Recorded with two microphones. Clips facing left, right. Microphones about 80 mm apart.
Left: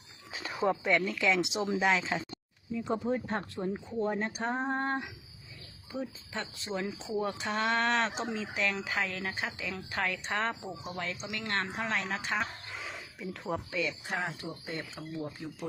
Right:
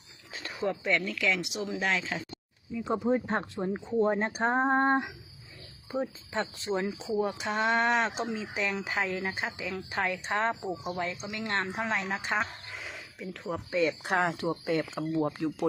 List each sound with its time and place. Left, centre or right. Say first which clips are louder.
0.3 s a sound: left 2 dB; centre
0.6 s speech: left 1 dB; centre
1.8 s speech: left 2 dB; centre
2.8 s speech: right 4 dB; centre; by 6.8 s right
7.2 s speech: right 2 dB; centre
12.4 s a sound: right 2 dB; centre
13.5 s speech: even; centre
14.0 s speech: right 8 dB; right